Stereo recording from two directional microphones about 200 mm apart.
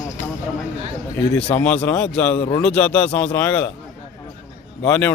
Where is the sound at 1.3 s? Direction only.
5° left (ahead or behind).